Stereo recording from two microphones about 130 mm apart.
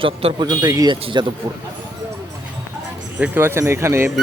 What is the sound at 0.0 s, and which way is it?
Speech, 45° right (ahead or behind).